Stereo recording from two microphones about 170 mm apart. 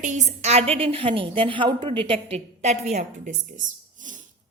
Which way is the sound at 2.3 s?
40° right (ahead or behind).